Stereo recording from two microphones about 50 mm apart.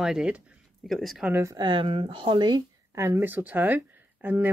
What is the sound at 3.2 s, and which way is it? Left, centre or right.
Speech, right.